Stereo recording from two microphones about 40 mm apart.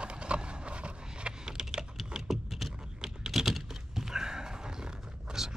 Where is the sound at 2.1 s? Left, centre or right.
Centre.